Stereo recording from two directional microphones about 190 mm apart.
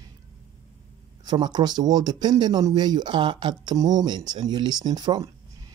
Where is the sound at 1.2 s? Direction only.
20° right (ahead or behind).